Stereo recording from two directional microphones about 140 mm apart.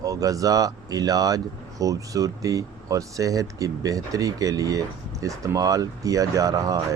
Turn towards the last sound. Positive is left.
turn(degrees=-25)  # may be behind; listen again after turning